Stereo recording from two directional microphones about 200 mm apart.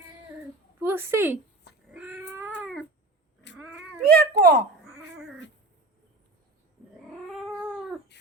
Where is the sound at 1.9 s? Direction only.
5° right (ahead or behind).